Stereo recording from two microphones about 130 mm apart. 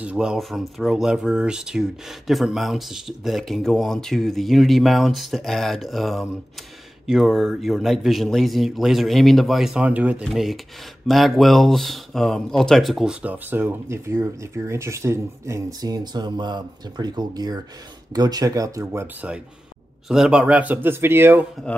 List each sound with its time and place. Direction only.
0.0 s speech: 10° right (ahead or behind)
20.1 s speech: 5° right (ahead or behind)